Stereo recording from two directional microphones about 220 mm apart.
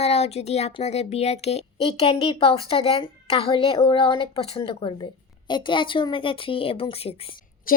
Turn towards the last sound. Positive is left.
turn(degrees=40)  # may be behind; listen again after turning